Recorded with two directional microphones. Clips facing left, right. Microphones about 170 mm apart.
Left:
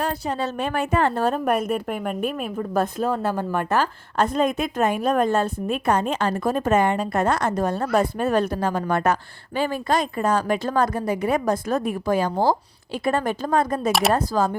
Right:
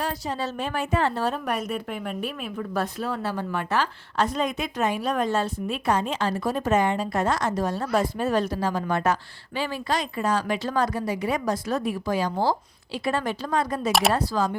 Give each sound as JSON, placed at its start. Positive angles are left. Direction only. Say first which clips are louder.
{"t": 0.0, "sound": "a woman's voice", "louder": "left 3 dB", "side_deg": 55}